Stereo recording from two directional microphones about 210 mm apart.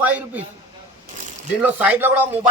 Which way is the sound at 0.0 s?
10° right (ahead or behind).